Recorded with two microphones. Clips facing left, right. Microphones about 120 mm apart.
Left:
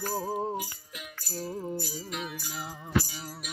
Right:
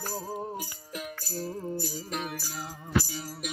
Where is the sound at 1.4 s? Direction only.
15° left (ahead or behind).